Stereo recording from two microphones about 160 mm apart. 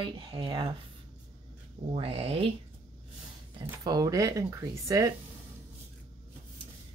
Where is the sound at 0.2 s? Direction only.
30° right (ahead or behind).